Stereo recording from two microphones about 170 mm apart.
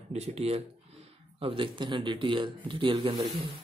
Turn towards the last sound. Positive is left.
turn(degrees=-30)  # may be behind; listen again after turning